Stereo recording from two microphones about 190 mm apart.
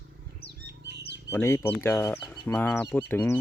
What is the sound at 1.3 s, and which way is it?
Speech, 15° left (ahead or behind).